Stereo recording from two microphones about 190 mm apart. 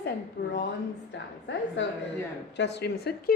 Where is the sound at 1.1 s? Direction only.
70° left (ahead or behind).